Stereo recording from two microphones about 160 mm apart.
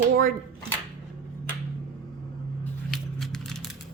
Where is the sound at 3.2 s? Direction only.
Centre (ahead or behind).